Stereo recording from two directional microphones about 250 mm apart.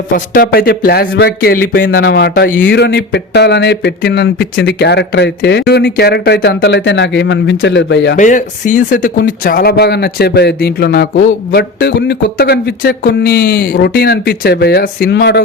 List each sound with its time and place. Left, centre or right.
0.1 s speech: left
8.2 s speech: left